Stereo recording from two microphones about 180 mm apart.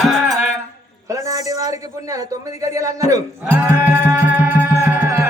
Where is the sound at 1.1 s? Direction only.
20° right (ahead or behind).